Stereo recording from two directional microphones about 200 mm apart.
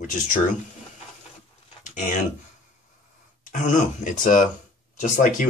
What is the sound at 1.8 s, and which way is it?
Speech, 40° left (ahead or behind).